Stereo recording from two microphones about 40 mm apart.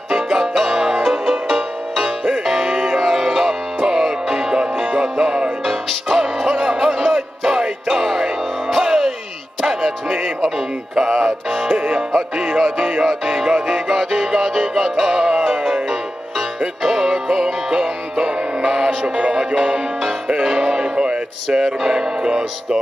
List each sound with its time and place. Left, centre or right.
0.1 s music: centre
10.0 s music: centre
11.7 s music: centre
21.0 s music: right